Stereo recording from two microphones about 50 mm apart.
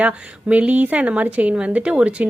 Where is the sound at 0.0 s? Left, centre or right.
Right.